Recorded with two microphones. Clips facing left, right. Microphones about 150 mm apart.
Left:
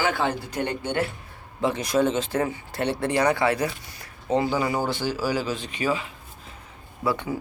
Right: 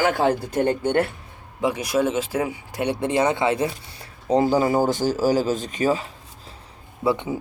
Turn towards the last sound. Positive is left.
turn(degrees=-25)  # may be behind; listen again after turning